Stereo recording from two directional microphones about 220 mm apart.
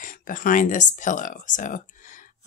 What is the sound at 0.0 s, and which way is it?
Speech, 35° left (ahead or behind).